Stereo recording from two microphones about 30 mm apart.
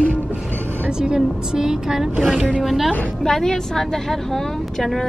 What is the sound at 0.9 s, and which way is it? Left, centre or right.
A woman's voice, right.